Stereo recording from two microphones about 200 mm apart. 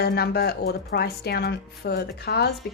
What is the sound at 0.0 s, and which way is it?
A woman's voice, 50° left (ahead or behind).